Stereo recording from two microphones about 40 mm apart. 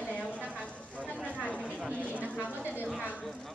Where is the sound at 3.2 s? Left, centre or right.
Centre.